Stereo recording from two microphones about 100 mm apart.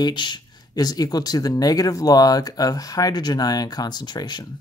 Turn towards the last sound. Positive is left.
turn(degrees=45)  # may be behind; listen again after turning